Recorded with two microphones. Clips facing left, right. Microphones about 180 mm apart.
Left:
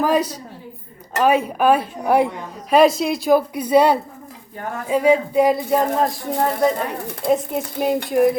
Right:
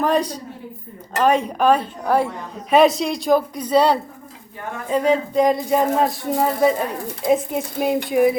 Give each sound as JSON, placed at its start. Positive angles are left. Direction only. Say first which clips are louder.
{"t": 0.0, "sound": "speech", "louder": "left 1 dB", "side_deg": 5}
{"t": 2.6, "sound": "speech", "louder": "left 1 dB", "side_deg": 0}